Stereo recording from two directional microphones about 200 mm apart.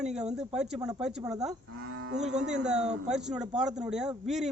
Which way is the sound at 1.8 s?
90° right.